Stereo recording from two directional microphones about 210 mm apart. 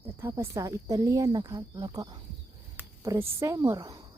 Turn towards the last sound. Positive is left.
turn(degrees=-15)  # may be behind; listen again after turning